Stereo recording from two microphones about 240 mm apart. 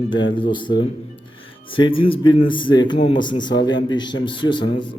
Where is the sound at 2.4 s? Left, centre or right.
Centre.